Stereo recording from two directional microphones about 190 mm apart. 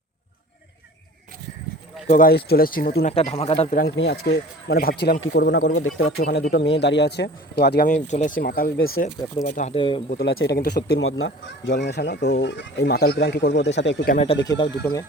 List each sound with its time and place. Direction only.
2.0 s speech: 45° left (ahead or behind)
3.0 s speech: 35° left (ahead or behind)
3.9 s speech: 60° left (ahead or behind); by 6.2 s 85° left
6.5 s speech: 65° left (ahead or behind)
9.4 s speech: 40° left (ahead or behind)
9.7 s speech: 30° left (ahead or behind)
10.1 s speech: 55° left (ahead or behind)
10.9 s speech: 90° left
11.3 s speech: 65° left (ahead or behind)
14.1 s speech: 35° left (ahead or behind)
14.4 s speech: 20° left (ahead or behind)